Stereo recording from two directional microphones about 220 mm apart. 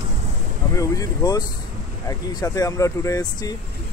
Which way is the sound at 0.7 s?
15° left (ahead or behind).